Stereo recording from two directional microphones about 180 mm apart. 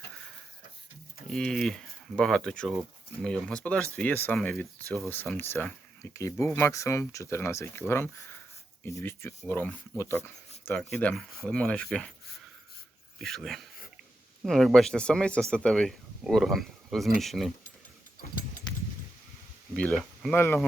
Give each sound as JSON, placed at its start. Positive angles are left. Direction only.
{"t": 1.3, "sound": "speech", "side_deg": 0}
{"t": 13.1, "sound": "a sound", "side_deg": 0}
{"t": 14.4, "sound": "speech", "side_deg": 0}
{"t": 19.7, "sound": "speech", "side_deg": 5}